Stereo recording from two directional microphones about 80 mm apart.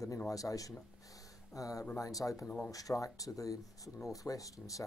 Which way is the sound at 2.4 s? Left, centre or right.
Centre.